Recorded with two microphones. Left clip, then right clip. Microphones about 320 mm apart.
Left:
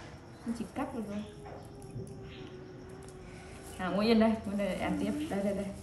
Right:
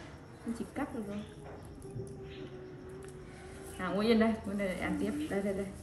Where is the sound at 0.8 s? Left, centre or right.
Centre.